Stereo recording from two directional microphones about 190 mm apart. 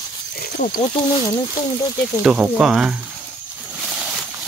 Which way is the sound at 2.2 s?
5° right (ahead or behind).